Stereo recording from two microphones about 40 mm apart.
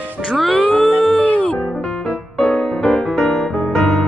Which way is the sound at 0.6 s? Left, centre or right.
Centre.